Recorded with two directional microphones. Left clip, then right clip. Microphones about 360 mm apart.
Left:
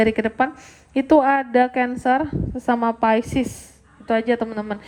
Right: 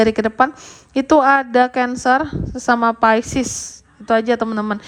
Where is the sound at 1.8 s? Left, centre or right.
Left.